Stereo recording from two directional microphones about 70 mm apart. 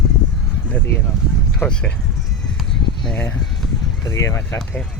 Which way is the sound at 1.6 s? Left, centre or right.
Centre.